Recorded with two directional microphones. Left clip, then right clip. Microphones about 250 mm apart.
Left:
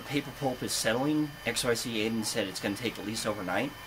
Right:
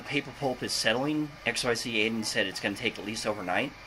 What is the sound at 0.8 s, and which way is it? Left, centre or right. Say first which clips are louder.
Speech: even; left.